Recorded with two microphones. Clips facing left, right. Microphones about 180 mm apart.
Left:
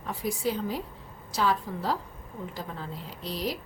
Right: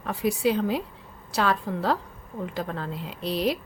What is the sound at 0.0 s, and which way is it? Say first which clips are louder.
Speech: right 6 dB; 70° right (ahead or behind).